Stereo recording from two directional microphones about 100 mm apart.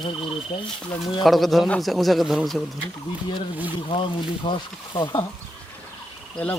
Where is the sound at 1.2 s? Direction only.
Centre (ahead or behind).